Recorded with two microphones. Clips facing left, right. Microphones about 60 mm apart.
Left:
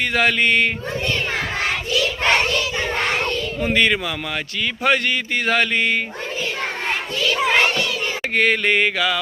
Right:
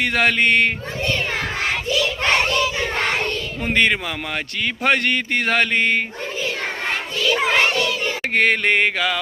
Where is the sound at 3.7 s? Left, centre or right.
Right.